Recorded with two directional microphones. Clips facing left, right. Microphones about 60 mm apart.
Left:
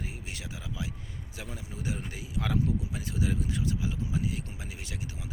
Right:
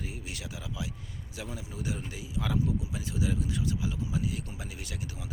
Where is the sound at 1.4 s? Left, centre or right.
Left.